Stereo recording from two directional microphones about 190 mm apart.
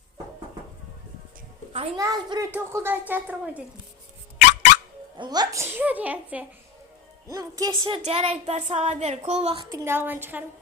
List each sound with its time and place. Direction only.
2.0 s a child's voice: 15° right (ahead or behind)
4.4 s dog: 40° left (ahead or behind)
5.1 s a child's voice: 20° right (ahead or behind)
7.3 s speech: 20° right (ahead or behind)